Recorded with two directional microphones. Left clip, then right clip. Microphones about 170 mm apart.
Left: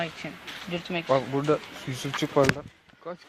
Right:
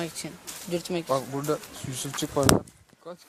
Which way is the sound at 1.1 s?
30° left (ahead or behind).